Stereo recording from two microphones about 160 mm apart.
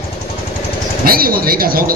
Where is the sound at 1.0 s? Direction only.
65° right (ahead or behind).